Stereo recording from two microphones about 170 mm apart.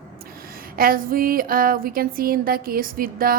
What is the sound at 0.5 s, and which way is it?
A woman's voice, 60° right (ahead or behind).